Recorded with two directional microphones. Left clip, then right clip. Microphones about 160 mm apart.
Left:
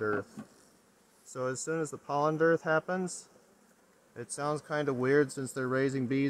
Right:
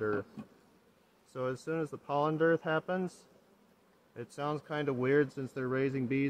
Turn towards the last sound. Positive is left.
turn(degrees=40)  # may be behind; listen again after turning